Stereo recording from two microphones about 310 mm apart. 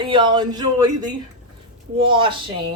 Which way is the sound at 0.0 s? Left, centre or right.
Centre.